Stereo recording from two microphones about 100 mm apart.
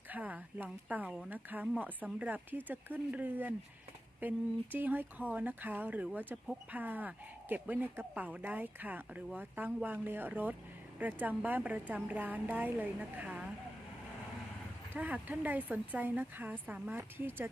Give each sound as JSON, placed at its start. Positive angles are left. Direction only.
{"t": 0.1, "sound": "speech", "side_deg": -15}
{"t": 14.9, "sound": "speech", "side_deg": -15}